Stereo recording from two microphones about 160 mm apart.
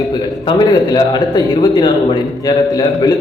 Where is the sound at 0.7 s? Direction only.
25° left (ahead or behind).